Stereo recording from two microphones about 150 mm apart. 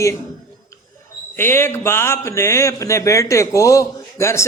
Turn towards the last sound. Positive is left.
turn(degrees=20)  # may be behind; listen again after turning